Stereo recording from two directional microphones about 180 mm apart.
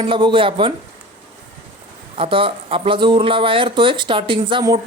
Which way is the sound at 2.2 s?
30° right (ahead or behind).